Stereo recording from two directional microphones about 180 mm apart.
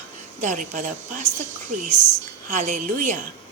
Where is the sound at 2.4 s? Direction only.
45° right (ahead or behind).